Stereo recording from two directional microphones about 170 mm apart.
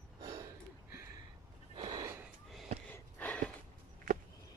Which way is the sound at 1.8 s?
25° right (ahead or behind).